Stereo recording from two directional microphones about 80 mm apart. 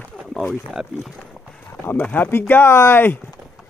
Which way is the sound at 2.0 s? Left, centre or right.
Left.